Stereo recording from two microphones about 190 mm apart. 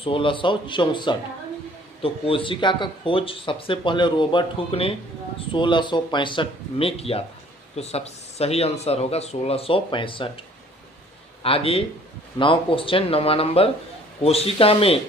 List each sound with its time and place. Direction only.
0.0 s speech: 30° left (ahead or behind)
11.4 s speech: 30° left (ahead or behind)